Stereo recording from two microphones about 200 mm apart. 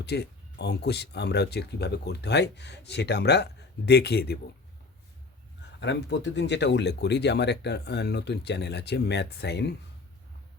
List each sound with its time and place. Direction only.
0.0 s speech: 55° left (ahead or behind)
5.8 s speech: 60° left (ahead or behind)